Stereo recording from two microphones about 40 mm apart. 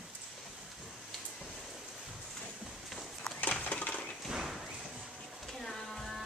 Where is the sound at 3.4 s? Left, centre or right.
Left.